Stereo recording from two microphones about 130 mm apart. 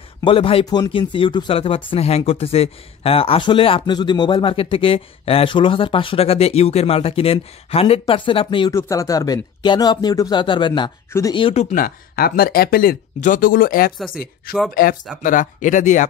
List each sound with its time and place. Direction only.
0.2 s speech: 45° left (ahead or behind)
8.7 s speech: 25° left (ahead or behind)
11.1 s speech: 20° left (ahead or behind)
11.7 s speech: 90° left; by 16.1 s 70° left (ahead or behind)